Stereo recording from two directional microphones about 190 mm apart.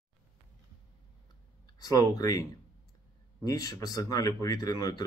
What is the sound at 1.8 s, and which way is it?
Speech, 20° left (ahead or behind).